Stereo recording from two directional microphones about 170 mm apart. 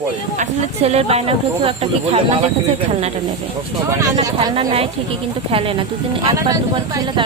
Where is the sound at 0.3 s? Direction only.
40° right (ahead or behind).